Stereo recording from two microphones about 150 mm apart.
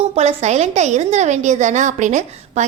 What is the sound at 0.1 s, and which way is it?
A woman's voice, 50° right (ahead or behind).